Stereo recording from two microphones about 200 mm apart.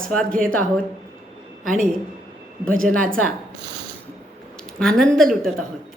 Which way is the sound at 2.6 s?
45° right (ahead or behind).